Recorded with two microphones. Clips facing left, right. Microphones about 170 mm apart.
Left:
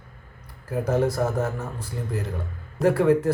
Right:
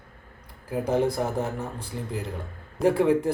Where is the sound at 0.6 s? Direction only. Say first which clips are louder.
Left 1 dB; 15° right (ahead or behind).